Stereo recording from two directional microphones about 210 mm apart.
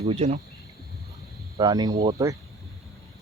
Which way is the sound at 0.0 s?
30° right (ahead or behind).